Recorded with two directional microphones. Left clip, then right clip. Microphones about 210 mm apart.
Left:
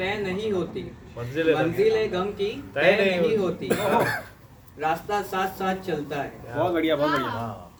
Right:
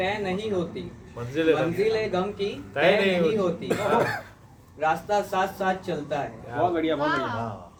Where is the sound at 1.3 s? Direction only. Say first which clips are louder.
Even; 20° right (ahead or behind).